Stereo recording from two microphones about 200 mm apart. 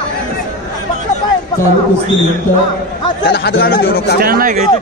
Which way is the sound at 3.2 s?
50° left (ahead or behind).